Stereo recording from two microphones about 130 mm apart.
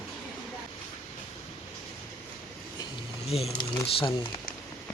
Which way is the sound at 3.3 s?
50° left (ahead or behind).